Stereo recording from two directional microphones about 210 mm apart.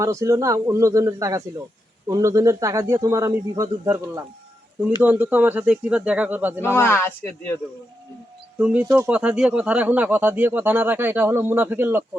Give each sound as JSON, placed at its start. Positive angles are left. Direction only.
{"t": 0.0, "sound": "speech", "side_deg": -15}
{"t": 6.7, "sound": "speech", "side_deg": 10}
{"t": 8.5, "sound": "speech", "side_deg": -5}